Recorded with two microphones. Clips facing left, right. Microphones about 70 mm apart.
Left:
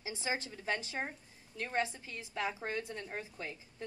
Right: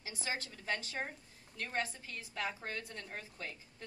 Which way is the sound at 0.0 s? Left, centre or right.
Centre.